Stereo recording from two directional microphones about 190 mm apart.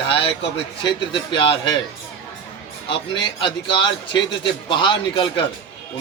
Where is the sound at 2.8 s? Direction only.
25° left (ahead or behind).